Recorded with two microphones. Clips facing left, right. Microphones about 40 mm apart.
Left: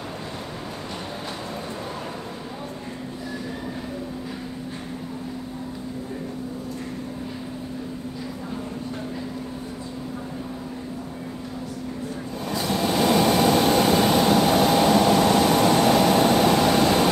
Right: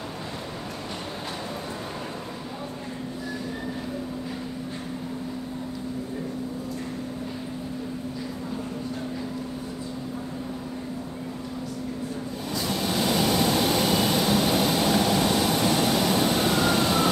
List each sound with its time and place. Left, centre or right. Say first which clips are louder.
12.4 s vehicle: left 4 dB; left
16.5 s vehicle: left 4 dB; left